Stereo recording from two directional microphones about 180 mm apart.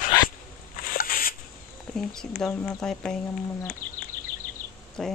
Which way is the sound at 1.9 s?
Centre (ahead or behind).